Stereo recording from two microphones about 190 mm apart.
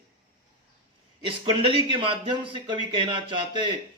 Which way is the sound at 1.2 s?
30° right (ahead or behind).